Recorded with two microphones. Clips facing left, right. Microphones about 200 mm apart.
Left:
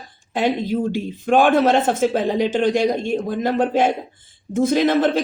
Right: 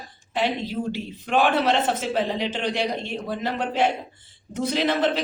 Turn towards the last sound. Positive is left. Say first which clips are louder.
# left 6 dB
turn(degrees=50)  # may be behind; listen again after turning